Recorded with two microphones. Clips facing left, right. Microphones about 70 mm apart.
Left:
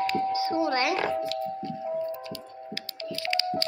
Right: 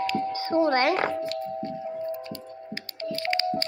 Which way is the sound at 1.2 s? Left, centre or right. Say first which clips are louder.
Even; right.